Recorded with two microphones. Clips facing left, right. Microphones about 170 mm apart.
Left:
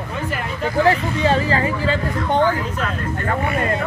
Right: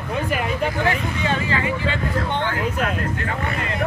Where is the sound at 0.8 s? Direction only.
35° left (ahead or behind).